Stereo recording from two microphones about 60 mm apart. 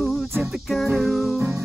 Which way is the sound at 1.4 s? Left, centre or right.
Right.